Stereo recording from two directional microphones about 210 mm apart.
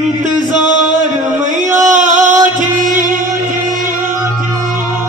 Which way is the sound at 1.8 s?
35° right (ahead or behind).